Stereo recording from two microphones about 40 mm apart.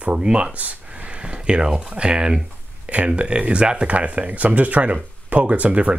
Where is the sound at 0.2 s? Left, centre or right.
Right.